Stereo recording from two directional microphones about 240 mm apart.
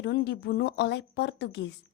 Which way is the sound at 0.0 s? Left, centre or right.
Left.